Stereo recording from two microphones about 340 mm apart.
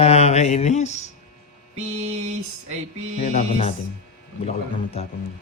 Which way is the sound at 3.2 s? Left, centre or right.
Centre.